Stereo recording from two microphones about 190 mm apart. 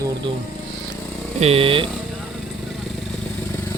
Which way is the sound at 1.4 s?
30° right (ahead or behind).